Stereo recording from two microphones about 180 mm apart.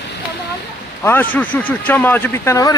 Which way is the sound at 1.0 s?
15° left (ahead or behind).